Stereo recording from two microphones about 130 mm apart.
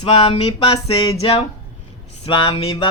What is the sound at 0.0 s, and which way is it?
Speech, 45° left (ahead or behind).